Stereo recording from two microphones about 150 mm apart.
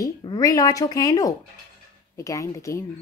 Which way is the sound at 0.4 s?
20° left (ahead or behind).